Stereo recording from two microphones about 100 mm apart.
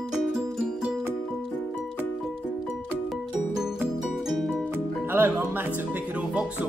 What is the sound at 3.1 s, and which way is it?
Music, 5° right (ahead or behind).